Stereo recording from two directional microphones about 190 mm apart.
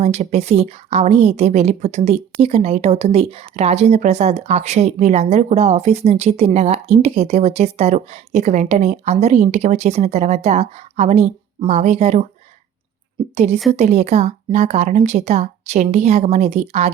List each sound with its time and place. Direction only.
0.0 s speech: 35° right (ahead or behind)
13.3 s speech: 35° right (ahead or behind)